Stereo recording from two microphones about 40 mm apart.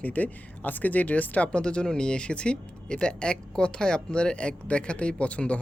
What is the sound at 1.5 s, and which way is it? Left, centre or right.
Speech, left.